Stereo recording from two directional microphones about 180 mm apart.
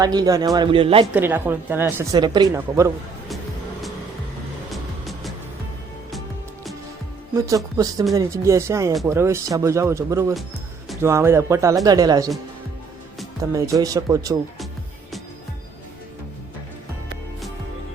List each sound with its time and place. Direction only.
0.0 s a man's voice: 20° right (ahead or behind)
1.0 s speech: 10° right (ahead or behind)
2.1 s a man's voice: 25° right (ahead or behind)
4.7 s music: centre (ahead or behind)
7.4 s a man's voice: 20° right (ahead or behind)
13.5 s a man's voice: 20° right (ahead or behind)